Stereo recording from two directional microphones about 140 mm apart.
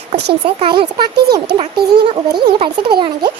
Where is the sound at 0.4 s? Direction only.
40° right (ahead or behind).